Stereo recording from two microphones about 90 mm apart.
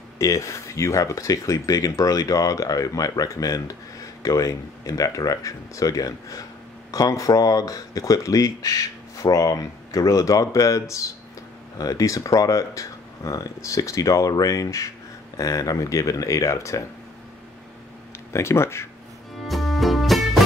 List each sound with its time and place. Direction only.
0.2 s speech: 35° left (ahead or behind)
18.3 s speech: 30° left (ahead or behind)
19.4 s music: centre (ahead or behind)